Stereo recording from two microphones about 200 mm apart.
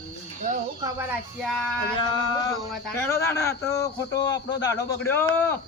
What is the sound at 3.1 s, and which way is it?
A man's voice, 15° left (ahead or behind).